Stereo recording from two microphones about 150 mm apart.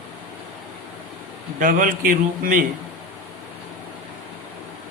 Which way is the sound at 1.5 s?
65° right (ahead or behind).